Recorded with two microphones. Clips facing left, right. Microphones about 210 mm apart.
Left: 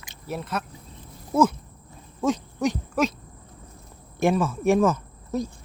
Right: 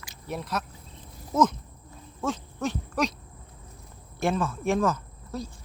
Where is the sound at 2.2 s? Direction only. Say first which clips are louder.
Left 6 dB; 15° left (ahead or behind).